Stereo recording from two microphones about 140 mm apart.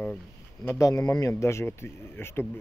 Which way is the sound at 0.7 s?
20° left (ahead or behind).